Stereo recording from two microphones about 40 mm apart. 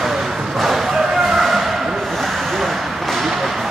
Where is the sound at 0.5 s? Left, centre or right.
Centre.